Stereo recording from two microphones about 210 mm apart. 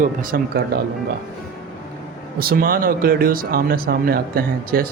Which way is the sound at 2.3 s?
45° right (ahead or behind).